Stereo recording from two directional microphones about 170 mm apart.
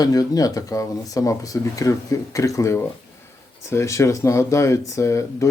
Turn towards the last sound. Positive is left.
turn(degrees=15)  # may be behind; listen again after turning